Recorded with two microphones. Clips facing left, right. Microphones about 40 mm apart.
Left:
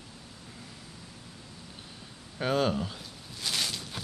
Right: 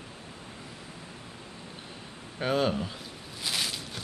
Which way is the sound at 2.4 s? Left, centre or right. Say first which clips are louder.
Even; centre.